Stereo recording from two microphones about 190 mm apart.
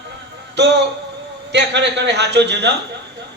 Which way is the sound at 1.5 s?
65° right (ahead or behind).